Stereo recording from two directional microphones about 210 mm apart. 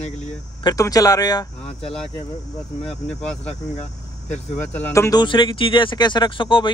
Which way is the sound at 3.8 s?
35° left (ahead or behind).